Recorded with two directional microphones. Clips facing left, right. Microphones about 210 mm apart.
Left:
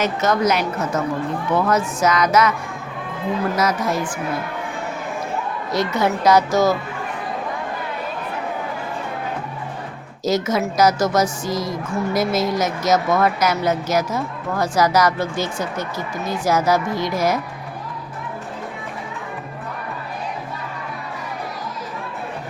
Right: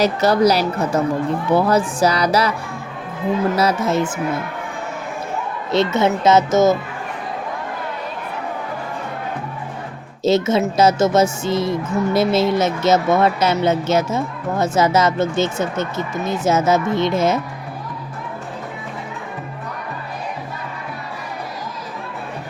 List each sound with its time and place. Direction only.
0.0 s a woman's voice: 35° right (ahead or behind)
5.7 s a woman's voice: 25° right (ahead or behind)
10.2 s a woman's voice: 25° right (ahead or behind)